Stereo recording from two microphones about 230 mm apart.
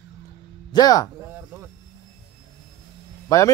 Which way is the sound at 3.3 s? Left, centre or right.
Centre.